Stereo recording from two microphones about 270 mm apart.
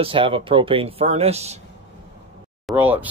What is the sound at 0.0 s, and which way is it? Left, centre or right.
Speech, centre.